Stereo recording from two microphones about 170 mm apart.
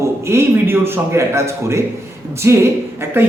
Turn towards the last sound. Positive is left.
turn(degrees=-15)  # may be behind; listen again after turning